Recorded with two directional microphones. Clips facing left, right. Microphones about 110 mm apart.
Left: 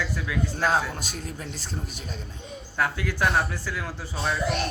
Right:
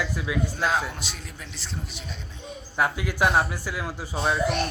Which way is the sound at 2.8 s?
15° right (ahead or behind).